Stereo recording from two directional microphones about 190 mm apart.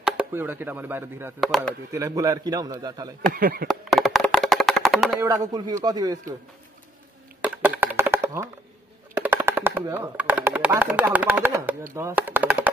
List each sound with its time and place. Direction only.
0.0 s speech: 10° right (ahead or behind)
1.4 s speech: centre (ahead or behind)
1.9 s a man's voice: 15° right (ahead or behind)
3.3 s speech: 50° right (ahead or behind)
3.6 s a sound: centre (ahead or behind)
5.2 s a man's voice: 15° right (ahead or behind)
7.4 s computer keyboard: 10° right (ahead or behind)
9.1 s speech: 10° right (ahead or behind)